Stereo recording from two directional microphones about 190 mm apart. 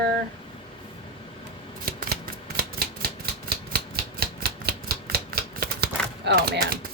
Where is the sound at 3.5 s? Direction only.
55° right (ahead or behind).